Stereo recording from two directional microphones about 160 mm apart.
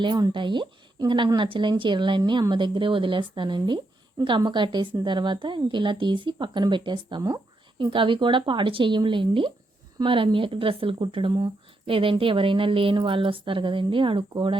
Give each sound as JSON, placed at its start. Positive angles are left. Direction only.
{"t": 0.0, "sound": "a woman's voice", "side_deg": -30}